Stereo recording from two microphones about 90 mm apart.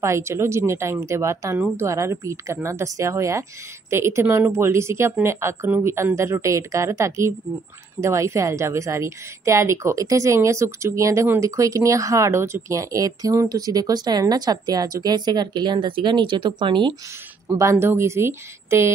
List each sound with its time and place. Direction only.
0.0 s a woman's voice: 30° right (ahead or behind); by 16.9 s 60° right (ahead or behind)
17.6 s a woman's voice: 30° right (ahead or behind)